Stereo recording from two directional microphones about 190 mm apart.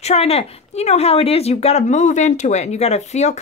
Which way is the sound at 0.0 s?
30° left (ahead or behind).